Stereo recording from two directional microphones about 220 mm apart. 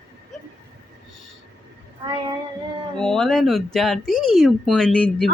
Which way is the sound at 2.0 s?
20° right (ahead or behind).